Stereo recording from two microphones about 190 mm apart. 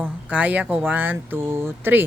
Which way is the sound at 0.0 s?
10° right (ahead or behind).